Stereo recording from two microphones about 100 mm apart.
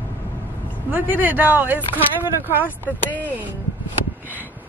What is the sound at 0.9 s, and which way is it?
Speech, 20° right (ahead or behind).